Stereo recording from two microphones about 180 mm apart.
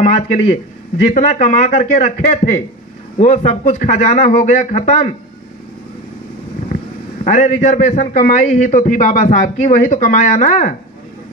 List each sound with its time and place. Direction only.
0.0 s a man's voice: 40° left (ahead or behind)
7.2 s a man's voice: 45° left (ahead or behind)